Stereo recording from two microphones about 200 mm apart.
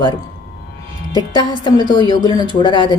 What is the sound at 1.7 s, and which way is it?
Speech, 20° left (ahead or behind).